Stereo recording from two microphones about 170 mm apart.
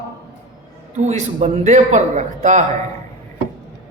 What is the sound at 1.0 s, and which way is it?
A woman's voice, 45° right (ahead or behind).